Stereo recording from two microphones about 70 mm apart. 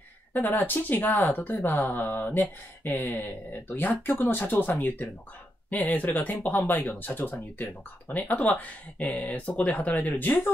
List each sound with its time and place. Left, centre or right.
0.3 s speech: left